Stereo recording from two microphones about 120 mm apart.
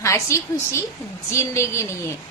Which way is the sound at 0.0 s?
25° left (ahead or behind).